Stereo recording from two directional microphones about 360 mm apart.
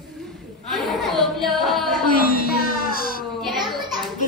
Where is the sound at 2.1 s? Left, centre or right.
Left.